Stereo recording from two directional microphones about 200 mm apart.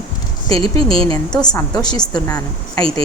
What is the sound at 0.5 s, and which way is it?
Speech, 25° right (ahead or behind).